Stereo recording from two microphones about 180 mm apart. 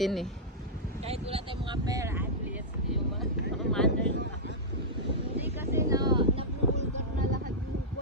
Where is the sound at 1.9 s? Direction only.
15° right (ahead or behind).